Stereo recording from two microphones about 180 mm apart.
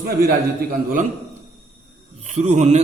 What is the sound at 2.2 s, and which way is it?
Speech, 40° right (ahead or behind).